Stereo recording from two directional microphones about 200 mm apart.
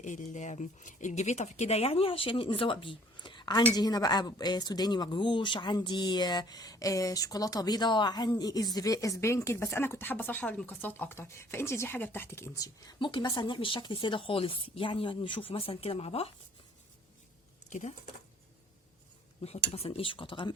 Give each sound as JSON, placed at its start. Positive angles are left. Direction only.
{"t": 0.0, "sound": "speech", "side_deg": 35}
{"t": 17.7, "sound": "speech", "side_deg": 35}
{"t": 19.4, "sound": "speech", "side_deg": 30}